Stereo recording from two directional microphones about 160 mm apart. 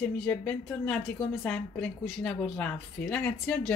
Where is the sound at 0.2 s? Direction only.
5° left (ahead or behind).